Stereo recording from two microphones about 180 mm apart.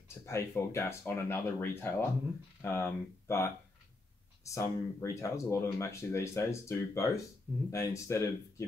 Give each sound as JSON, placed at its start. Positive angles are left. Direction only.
{"t": 0.2, "sound": "speech", "side_deg": 15}